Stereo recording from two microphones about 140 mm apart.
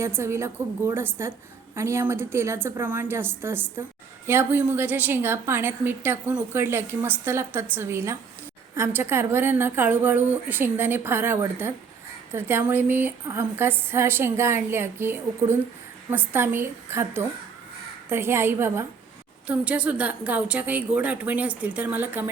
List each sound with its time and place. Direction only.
0.0 s a woman's voice: 20° right (ahead or behind)